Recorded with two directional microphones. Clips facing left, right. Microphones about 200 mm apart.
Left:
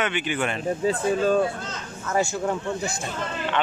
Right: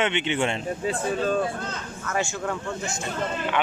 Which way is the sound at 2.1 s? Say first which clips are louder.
Left 4 dB; 35° left (ahead or behind).